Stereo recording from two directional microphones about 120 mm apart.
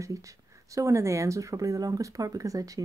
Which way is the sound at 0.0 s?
25° right (ahead or behind).